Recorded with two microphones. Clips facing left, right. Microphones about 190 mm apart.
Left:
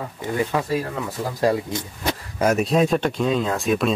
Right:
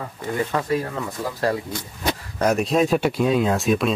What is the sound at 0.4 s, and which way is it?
Speech, 10° left (ahead or behind).